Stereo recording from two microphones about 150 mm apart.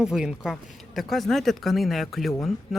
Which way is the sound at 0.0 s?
5° right (ahead or behind).